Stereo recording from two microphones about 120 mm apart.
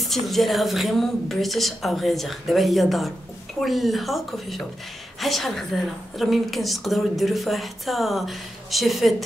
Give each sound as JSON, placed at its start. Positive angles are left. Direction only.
{"t": 0.0, "sound": "a woman's voice", "side_deg": 0}